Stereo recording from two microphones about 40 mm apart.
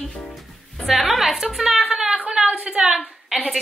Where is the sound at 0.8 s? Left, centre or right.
Centre.